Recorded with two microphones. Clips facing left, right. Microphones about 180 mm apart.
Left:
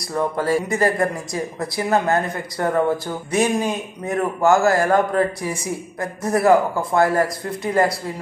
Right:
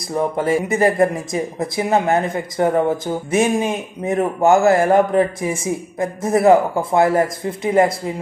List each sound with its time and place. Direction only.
0.1 s speech: 20° right (ahead or behind)